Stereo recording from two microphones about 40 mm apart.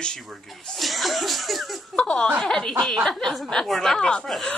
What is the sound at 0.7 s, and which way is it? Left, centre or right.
Speech, centre.